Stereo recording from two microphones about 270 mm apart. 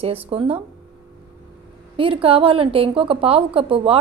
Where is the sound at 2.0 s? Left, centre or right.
Centre.